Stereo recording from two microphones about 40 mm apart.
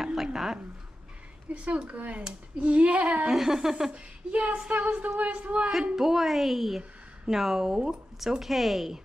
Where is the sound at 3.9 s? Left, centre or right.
Right.